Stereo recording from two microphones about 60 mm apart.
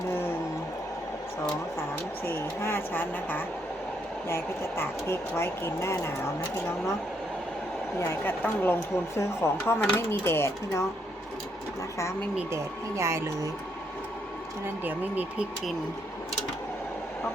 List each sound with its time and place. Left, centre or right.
0.1 s music: left
2.2 s a woman's voice: left
4.3 s speech: left
7.9 s a woman's voice: left
12.5 s speech: right
14.8 s speech: right